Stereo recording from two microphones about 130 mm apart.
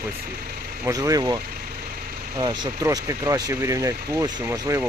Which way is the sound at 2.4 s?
30° right (ahead or behind).